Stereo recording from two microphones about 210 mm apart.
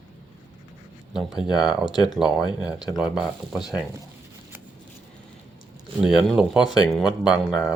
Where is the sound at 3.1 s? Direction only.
Centre (ahead or behind).